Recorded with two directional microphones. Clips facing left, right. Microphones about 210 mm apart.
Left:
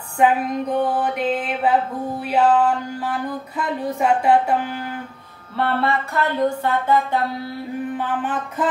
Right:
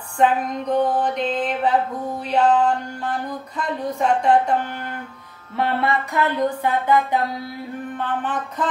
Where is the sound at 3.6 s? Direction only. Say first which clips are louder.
Left 1 dB; 5° left (ahead or behind).